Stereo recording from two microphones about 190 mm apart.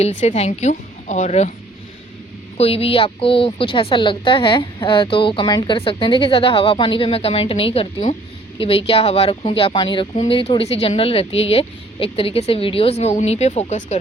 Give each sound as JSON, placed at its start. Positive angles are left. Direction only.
{"t": 0.0, "sound": "speech", "side_deg": 35}
{"t": 2.6, "sound": "a woman's voice", "side_deg": 30}